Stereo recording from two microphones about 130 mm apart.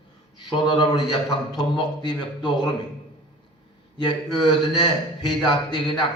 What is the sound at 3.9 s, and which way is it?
A man's voice, 35° left (ahead or behind).